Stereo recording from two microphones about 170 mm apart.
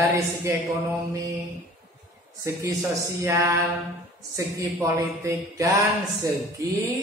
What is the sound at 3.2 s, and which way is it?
Speech, 15° right (ahead or behind).